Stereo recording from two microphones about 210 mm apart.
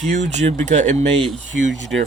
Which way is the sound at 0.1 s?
35° right (ahead or behind).